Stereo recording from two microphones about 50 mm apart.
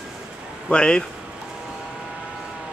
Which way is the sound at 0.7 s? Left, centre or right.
Centre.